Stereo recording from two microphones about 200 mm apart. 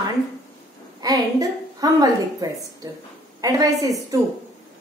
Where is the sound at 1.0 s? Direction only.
20° right (ahead or behind).